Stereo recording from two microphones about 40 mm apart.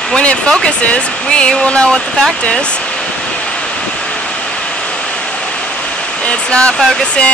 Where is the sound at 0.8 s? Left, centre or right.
Left.